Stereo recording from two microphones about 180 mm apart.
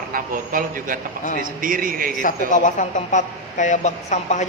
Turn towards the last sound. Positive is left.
turn(degrees=40)  # may be behind; listen again after turning